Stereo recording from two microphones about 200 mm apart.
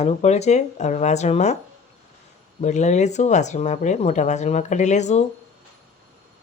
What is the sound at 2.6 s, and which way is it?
Speech, 35° left (ahead or behind).